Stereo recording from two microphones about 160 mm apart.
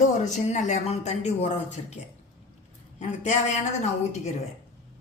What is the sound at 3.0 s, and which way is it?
Speech, 45° left (ahead or behind).